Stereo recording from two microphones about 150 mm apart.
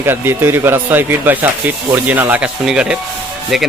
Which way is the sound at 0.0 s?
15° right (ahead or behind).